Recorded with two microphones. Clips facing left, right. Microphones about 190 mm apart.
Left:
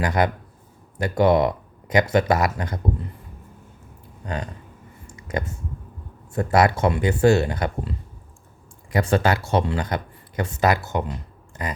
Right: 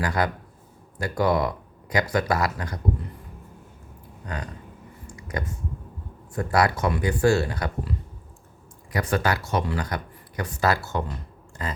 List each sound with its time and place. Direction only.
0.0 s speech: 20° left (ahead or behind)
4.2 s speech: 25° left (ahead or behind)
5.0 s a sound: 25° left (ahead or behind)
6.3 s speech: 25° left (ahead or behind)